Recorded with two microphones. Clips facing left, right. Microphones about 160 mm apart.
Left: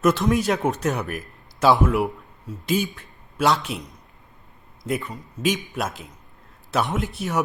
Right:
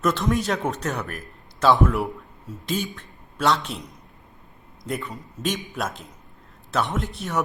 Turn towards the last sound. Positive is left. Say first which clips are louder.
# left 2 dB
turn(degrees=5)  # may be behind; listen again after turning